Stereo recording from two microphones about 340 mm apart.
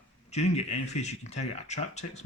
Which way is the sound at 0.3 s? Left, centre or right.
Centre.